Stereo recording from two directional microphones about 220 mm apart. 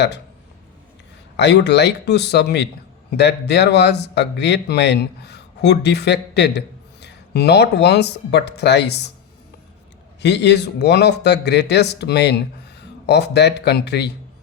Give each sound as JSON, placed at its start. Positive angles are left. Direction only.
{"t": 1.4, "sound": "speech", "side_deg": 50}
{"t": 10.2, "sound": "speech", "side_deg": 50}